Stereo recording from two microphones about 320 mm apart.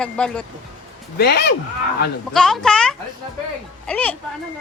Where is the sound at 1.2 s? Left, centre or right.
Left.